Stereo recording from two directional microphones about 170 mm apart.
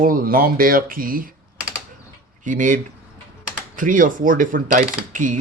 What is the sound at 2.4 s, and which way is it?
Speech, 50° right (ahead or behind).